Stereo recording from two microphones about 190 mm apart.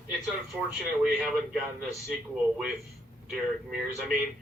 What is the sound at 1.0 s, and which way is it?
A man's voice, 5° right (ahead or behind).